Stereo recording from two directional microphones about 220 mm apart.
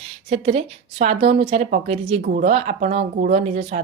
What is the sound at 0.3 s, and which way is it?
A woman's voice, 30° right (ahead or behind).